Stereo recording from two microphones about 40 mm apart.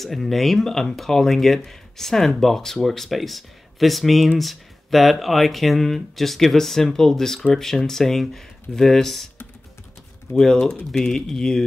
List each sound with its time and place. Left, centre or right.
0.0 s speech: centre
10.3 s speech: left
10.9 s speech: centre